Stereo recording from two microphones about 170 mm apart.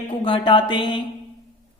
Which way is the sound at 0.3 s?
30° left (ahead or behind).